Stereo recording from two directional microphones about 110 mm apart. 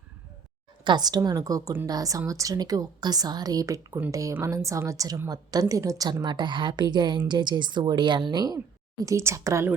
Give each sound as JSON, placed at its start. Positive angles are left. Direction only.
{"t": 0.9, "sound": "a woman's voice", "side_deg": -40}